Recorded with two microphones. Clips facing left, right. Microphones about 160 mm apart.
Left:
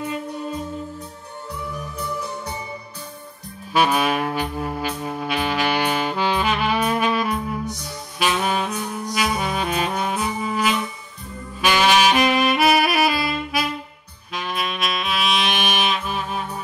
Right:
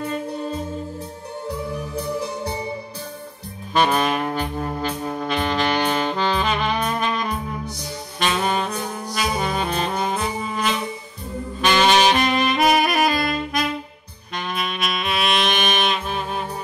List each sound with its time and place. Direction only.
1.7 s music: 35° right (ahead or behind)
3.7 s brass instrument: 5° left (ahead or behind)
8.2 s saxophone: 5° left (ahead or behind)